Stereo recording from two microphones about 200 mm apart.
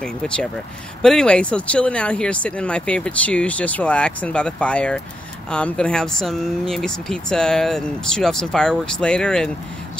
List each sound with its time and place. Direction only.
0.0 s speech: 5° left (ahead or behind)